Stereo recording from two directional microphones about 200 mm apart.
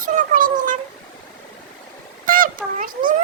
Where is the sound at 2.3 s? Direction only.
45° right (ahead or behind).